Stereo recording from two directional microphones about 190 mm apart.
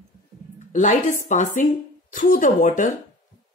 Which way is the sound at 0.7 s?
40° left (ahead or behind).